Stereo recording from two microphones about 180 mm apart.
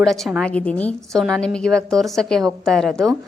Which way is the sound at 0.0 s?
Centre (ahead or behind).